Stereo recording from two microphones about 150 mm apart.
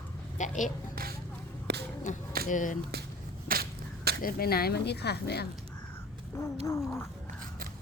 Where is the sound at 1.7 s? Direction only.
90° right.